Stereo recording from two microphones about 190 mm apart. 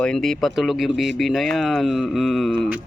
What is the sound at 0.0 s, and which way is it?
Speech, 5° left (ahead or behind).